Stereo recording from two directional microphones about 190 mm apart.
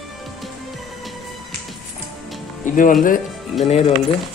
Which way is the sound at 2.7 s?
45° left (ahead or behind).